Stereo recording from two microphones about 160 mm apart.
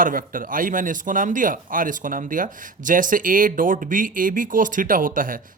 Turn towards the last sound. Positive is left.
turn(degrees=-60)  # may be behind; listen again after turning